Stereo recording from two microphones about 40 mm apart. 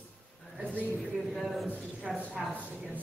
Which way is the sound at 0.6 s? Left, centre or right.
Right.